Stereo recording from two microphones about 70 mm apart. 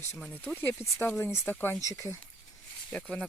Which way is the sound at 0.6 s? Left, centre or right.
Left.